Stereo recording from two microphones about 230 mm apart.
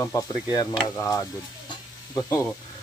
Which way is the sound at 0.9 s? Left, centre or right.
Centre.